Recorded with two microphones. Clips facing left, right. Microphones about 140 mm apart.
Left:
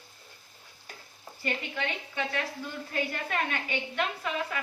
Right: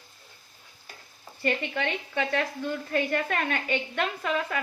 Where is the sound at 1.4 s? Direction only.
70° right (ahead or behind).